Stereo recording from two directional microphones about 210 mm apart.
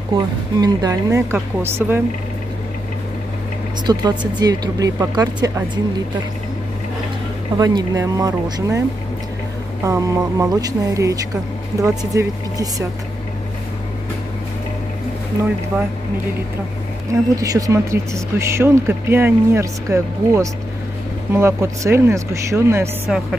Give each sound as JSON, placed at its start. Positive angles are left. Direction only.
{"t": 0.1, "sound": "speech", "side_deg": -20}
{"t": 3.8, "sound": "speech", "side_deg": -20}
{"t": 7.5, "sound": "speech", "side_deg": -20}
{"t": 9.8, "sound": "speech", "side_deg": -15}
{"t": 17.1, "sound": "speech", "side_deg": -15}